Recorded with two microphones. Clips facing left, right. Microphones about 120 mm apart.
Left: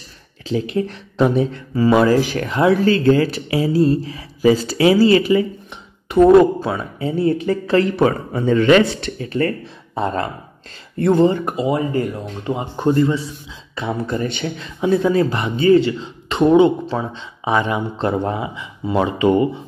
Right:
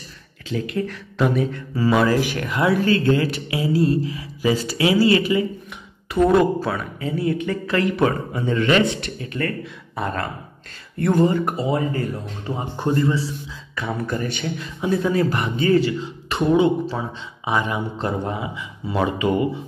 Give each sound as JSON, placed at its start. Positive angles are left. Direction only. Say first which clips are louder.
{"t": 0.5, "sound": "speech", "louder": "left 4 dB", "side_deg": 30}
{"t": 18.0, "sound": "speech", "louder": "left 6 dB", "side_deg": 25}